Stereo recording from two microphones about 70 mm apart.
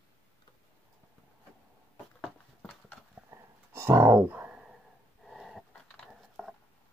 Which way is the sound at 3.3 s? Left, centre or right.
Right.